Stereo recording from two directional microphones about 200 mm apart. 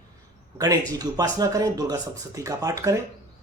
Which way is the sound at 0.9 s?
20° right (ahead or behind).